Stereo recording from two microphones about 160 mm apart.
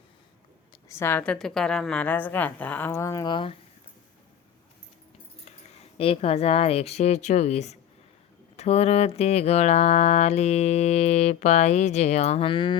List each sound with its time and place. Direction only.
0.9 s a woman's voice: 15° left (ahead or behind); by 3.6 s 30° left (ahead or behind)
5.5 s speech: 40° left (ahead or behind)
8.5 s mantra: 40° left (ahead or behind)